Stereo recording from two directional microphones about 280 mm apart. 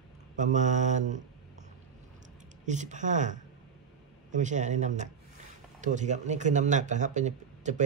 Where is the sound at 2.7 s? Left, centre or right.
Right.